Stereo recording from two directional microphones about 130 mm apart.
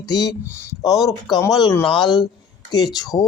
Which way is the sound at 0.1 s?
30° left (ahead or behind).